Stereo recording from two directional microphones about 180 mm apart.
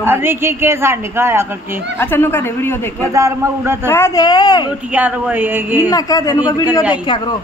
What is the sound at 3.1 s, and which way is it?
Speech, 15° right (ahead or behind).